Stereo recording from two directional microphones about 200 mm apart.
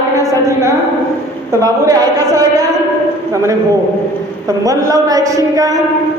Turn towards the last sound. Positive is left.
turn(degrees=-15)  # may be behind; listen again after turning